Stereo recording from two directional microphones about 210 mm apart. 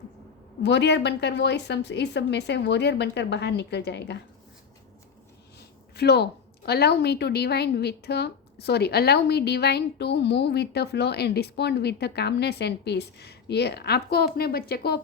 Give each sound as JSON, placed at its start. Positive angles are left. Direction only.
{"t": 0.6, "sound": "a woman's voice", "side_deg": 55}
{"t": 5.5, "sound": "a woman's voice", "side_deg": 50}